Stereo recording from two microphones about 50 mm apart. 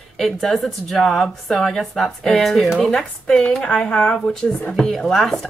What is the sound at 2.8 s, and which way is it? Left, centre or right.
Speech, centre.